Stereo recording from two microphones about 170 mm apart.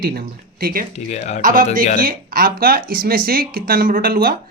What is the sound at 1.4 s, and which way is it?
Speech, 55° right (ahead or behind).